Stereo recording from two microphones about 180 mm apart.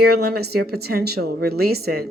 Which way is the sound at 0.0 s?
60° right (ahead or behind).